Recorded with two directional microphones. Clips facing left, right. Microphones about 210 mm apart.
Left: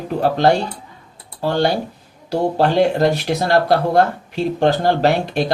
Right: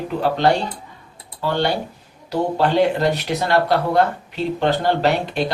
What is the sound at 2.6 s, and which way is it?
Speech, 45° left (ahead or behind).